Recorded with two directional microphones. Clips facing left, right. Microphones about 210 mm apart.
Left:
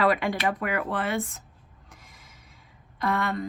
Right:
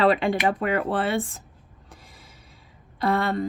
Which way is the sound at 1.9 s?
30° right (ahead or behind).